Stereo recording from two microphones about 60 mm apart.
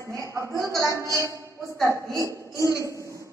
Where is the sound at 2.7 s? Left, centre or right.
Left.